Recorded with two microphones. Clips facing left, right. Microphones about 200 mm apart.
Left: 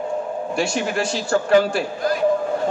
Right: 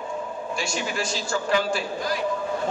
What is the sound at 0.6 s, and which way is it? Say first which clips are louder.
A man's voice: left 7 dB; 60° left (ahead or behind).